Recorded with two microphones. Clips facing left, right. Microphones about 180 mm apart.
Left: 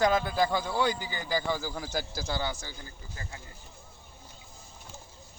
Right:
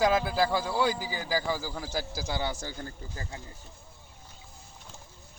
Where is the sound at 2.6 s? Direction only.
55° right (ahead or behind).